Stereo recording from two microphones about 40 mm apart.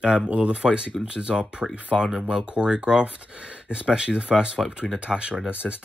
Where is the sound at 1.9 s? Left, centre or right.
Centre.